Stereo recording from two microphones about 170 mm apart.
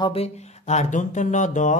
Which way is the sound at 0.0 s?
35° left (ahead or behind).